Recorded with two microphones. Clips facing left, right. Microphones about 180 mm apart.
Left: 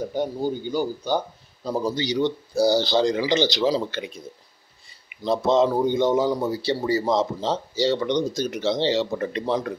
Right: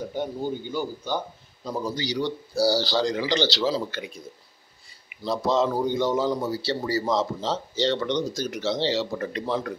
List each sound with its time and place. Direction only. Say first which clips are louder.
0.7 s a man's voice: left 5 dB; 35° left (ahead or behind)
1.7 s speech: left 4 dB; 25° left (ahead or behind)
5.2 s a man's voice: left 4 dB; 20° left (ahead or behind)